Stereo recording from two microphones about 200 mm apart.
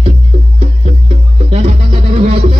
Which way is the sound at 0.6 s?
35° right (ahead or behind).